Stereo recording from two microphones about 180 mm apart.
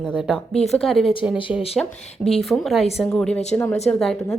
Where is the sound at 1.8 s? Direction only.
5° left (ahead or behind).